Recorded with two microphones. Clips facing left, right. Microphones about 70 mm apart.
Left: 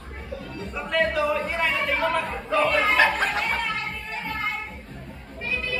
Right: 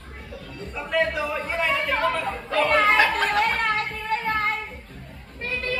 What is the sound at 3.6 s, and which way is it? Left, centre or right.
Music, right.